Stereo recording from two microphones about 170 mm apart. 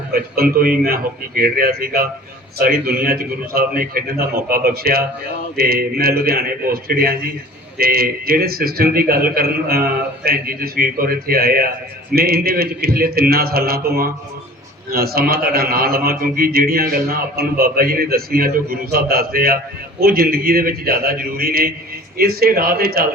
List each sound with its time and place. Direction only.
0.1 s a man's voice: 60° right (ahead or behind)